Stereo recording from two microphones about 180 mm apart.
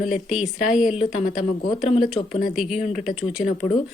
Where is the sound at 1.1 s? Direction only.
40° left (ahead or behind).